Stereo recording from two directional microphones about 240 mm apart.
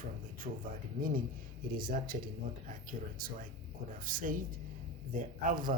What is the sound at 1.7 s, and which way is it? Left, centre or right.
Speech, right.